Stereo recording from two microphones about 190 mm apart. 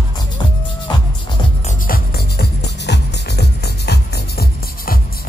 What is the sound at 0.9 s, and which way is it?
Music, 25° left (ahead or behind).